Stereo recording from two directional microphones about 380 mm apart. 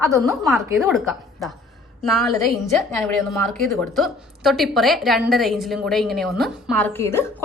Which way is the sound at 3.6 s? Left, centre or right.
Centre.